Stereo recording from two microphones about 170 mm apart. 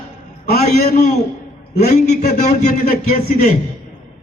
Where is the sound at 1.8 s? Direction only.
65° left (ahead or behind).